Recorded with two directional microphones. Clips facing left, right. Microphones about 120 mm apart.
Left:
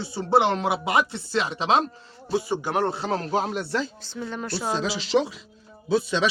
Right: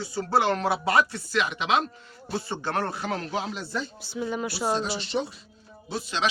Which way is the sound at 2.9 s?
30° left (ahead or behind).